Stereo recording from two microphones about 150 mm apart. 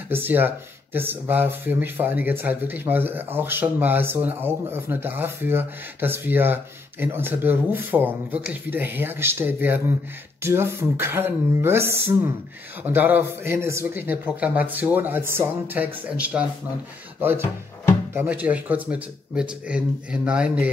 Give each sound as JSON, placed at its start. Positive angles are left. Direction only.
{"t": 0.1, "sound": "speech", "side_deg": -15}
{"t": 18.1, "sound": "speech", "side_deg": -15}